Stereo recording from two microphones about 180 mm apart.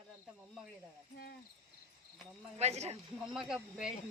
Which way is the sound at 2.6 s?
35° right (ahead or behind).